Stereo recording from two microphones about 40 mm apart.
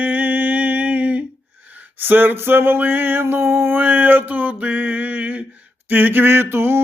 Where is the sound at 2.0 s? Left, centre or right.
Right.